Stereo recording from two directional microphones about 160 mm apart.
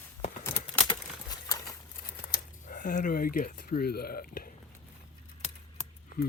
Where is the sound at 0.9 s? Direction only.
25° left (ahead or behind).